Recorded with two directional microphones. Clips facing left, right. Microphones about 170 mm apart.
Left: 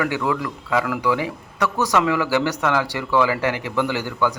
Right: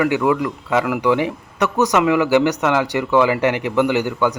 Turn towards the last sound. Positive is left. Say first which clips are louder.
# right 4 dB
turn(degrees=-20)  # may be behind; listen again after turning